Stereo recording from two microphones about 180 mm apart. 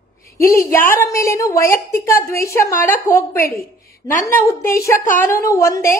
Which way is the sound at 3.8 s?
55° left (ahead or behind).